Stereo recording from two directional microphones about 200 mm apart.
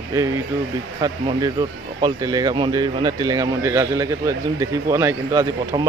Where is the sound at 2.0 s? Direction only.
20° right (ahead or behind).